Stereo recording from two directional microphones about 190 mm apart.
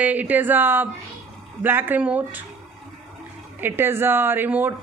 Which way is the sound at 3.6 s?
10° right (ahead or behind).